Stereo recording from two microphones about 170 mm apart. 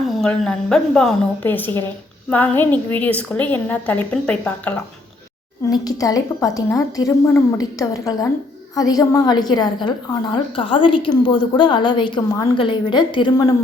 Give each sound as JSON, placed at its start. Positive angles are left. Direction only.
{"t": 0.1, "sound": "a woman's voice", "side_deg": 5}
{"t": 5.6, "sound": "a woman's voice", "side_deg": 20}